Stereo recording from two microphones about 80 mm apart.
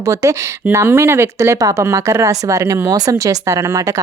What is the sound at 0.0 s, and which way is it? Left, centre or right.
Speech, right.